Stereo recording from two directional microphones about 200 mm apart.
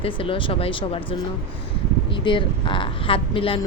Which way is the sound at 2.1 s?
25° left (ahead or behind).